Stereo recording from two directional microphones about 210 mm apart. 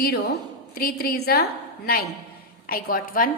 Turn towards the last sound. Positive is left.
turn(degrees=40)  # may be behind; listen again after turning